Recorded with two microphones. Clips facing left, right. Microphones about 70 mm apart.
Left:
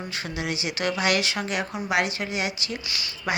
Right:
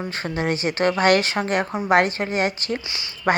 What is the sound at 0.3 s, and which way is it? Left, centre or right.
A woman's voice, right.